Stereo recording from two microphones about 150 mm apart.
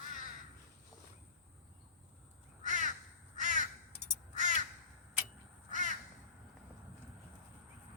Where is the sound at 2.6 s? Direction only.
55° right (ahead or behind).